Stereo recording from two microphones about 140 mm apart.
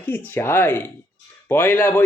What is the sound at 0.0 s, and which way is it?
Speech, 15° left (ahead or behind).